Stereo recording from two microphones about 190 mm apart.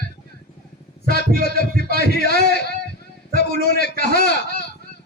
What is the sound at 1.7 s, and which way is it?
Speech, 50° right (ahead or behind).